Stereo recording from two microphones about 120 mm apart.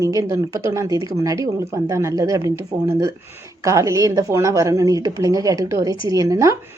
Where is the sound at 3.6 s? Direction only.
25° right (ahead or behind).